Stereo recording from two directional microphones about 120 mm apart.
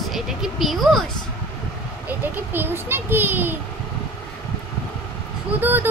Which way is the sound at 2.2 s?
15° right (ahead or behind).